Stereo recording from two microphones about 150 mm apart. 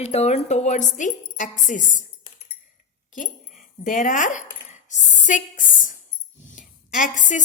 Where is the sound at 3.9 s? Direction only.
55° left (ahead or behind).